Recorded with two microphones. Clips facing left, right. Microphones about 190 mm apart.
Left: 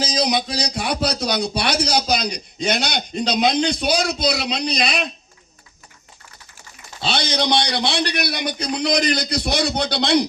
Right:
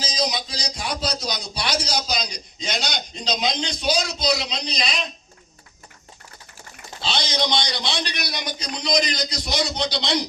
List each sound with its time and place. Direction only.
0.0 s a man's voice: 60° left (ahead or behind)
7.0 s a man's voice: 60° left (ahead or behind)